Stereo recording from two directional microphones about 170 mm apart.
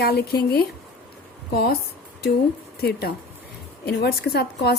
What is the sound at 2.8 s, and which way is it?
A woman's voice, 70° left (ahead or behind).